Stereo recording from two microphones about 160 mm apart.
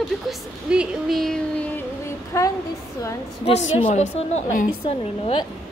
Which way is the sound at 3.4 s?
40° left (ahead or behind).